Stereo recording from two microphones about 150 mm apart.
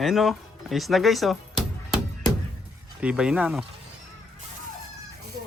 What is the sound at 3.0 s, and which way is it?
Speech, 5° right (ahead or behind).